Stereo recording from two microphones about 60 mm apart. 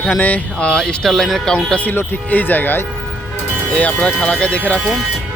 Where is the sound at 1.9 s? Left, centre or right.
Left.